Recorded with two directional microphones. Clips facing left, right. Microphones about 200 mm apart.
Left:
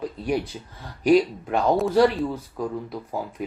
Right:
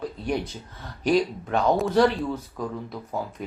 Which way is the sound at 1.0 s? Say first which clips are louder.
Left 4 dB; 10° left (ahead or behind).